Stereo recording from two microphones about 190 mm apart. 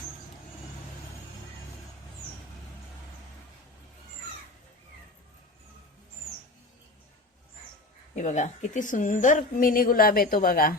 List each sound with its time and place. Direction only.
8.1 s a woman's voice: 40° left (ahead or behind)